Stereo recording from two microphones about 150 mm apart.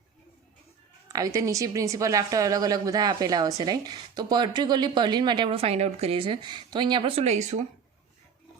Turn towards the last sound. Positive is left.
turn(degrees=-50)  # may be behind; listen again after turning